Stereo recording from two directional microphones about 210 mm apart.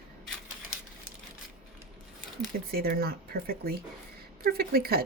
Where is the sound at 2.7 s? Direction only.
45° right (ahead or behind).